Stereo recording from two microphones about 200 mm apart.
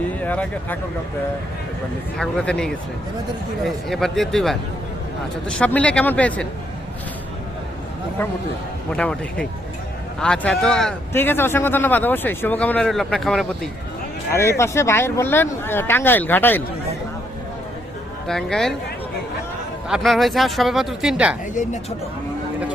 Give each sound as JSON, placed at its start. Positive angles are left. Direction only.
{"t": 0.2, "sound": "a man's voice", "side_deg": 10}
{"t": 2.1, "sound": "a man's voice", "side_deg": 5}
{"t": 8.9, "sound": "a man's voice", "side_deg": 5}
{"t": 14.3, "sound": "a man's voice", "side_deg": 15}
{"t": 18.3, "sound": "speech", "side_deg": 0}
{"t": 19.9, "sound": "speech", "side_deg": 0}
{"t": 21.5, "sound": "speech", "side_deg": 35}